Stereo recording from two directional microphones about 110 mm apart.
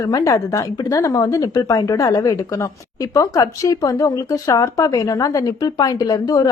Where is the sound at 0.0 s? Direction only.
30° left (ahead or behind).